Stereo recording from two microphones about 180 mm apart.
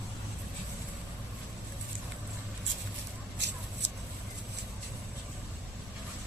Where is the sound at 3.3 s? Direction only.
75° right (ahead or behind).